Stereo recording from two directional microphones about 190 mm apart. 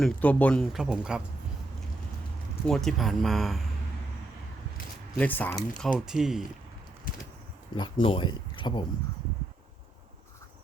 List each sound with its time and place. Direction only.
0.0 s speech: 10° left (ahead or behind)
2.6 s speech: centre (ahead or behind)
5.1 s speech: 10° left (ahead or behind)
5.8 s speech: centre (ahead or behind)
7.8 s speech: 25° left (ahead or behind)